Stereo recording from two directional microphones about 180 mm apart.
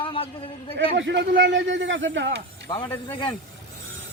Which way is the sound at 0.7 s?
80° right.